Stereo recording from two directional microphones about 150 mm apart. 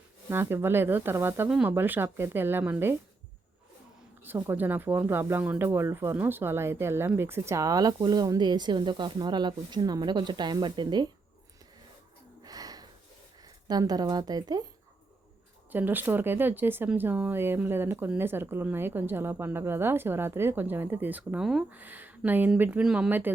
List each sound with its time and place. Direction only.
0.3 s speech: 15° right (ahead or behind)
4.2 s speech: 15° right (ahead or behind)
12.4 s snort: 25° right (ahead or behind)
13.4 s speech: 25° right (ahead or behind)
15.7 s speech: 15° right (ahead or behind)